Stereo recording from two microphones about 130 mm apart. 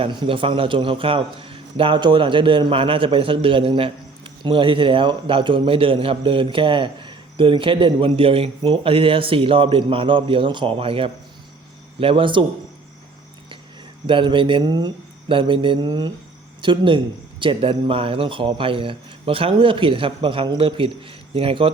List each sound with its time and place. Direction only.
0.0 s a man's voice: 40° right (ahead or behind)
14.1 s a man's voice: 40° right (ahead or behind)